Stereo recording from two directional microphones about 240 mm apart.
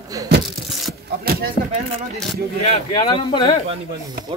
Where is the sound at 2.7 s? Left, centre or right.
Centre.